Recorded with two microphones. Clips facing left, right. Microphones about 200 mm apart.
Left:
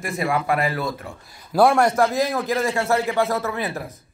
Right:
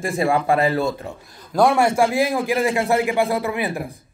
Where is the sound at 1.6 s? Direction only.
5° right (ahead or behind).